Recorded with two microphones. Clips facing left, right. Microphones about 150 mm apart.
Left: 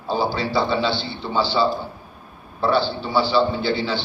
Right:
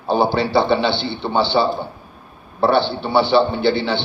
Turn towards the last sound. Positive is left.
turn(degrees=-65)  # may be behind; listen again after turning